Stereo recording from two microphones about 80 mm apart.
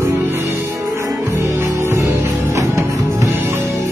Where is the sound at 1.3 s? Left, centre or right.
Right.